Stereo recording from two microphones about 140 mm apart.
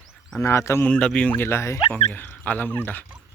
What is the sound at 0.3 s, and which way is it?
Speech, 20° left (ahead or behind).